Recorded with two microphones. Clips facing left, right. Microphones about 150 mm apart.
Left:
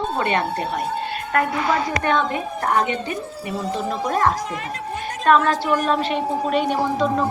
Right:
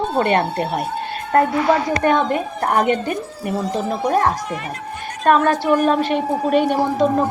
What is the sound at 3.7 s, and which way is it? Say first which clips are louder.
A woman's voice: right 3 dB; 40° right (ahead or behind).